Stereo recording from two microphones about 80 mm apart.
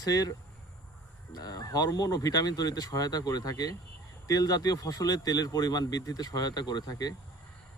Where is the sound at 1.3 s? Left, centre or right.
Left.